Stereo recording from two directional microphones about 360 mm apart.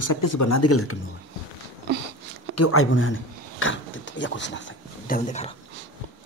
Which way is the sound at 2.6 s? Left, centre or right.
Left.